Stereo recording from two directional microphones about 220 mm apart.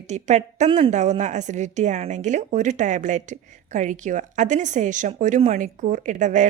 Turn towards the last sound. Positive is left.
turn(degrees=-35)  # may be behind; listen again after turning